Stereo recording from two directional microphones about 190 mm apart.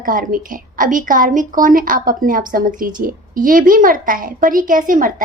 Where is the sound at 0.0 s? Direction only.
45° right (ahead or behind).